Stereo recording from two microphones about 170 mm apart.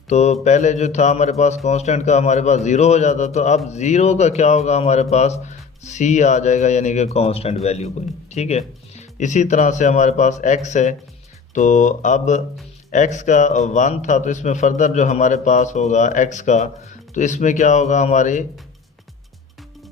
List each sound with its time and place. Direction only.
0.1 s a man's voice: 40° left (ahead or behind)